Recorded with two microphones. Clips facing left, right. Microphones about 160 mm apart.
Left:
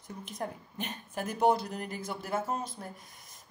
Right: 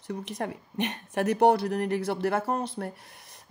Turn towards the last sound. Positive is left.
turn(degrees=-65)  # may be behind; listen again after turning